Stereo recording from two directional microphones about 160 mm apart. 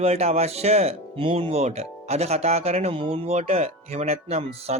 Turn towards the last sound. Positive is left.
turn(degrees=-40)  # may be behind; listen again after turning